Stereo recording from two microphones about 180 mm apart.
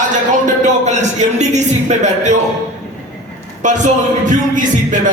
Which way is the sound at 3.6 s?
45° right (ahead or behind).